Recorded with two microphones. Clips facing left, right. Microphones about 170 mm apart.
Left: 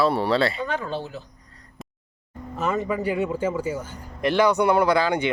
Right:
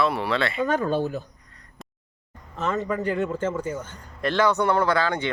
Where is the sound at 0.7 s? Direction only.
45° right (ahead or behind).